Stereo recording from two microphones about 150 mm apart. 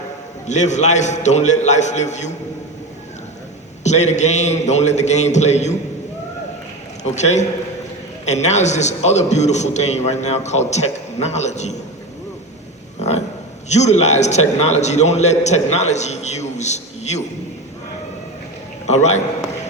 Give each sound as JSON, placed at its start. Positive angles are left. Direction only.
{"t": 0.4, "sound": "a man's voice", "side_deg": 50}
{"t": 3.8, "sound": "a man's voice", "side_deg": 50}
{"t": 7.0, "sound": "a man's voice", "side_deg": 50}
{"t": 13.7, "sound": "a man's voice", "side_deg": 50}
{"t": 18.9, "sound": "a man's voice", "side_deg": 50}